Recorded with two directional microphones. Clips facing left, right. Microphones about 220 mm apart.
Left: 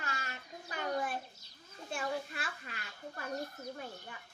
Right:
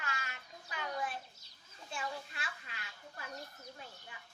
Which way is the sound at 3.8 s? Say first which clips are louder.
Left 7 dB; 55° left (ahead or behind).